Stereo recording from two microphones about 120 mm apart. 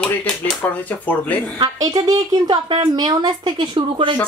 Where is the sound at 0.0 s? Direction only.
15° left (ahead or behind).